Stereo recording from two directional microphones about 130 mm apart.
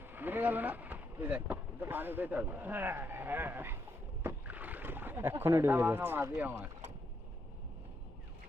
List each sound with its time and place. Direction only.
0.1 s speech: 15° right (ahead or behind)
4.2 s rowboat: 15° right (ahead or behind)